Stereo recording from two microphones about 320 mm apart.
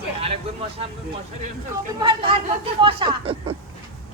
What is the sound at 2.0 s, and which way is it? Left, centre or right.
Speech, centre.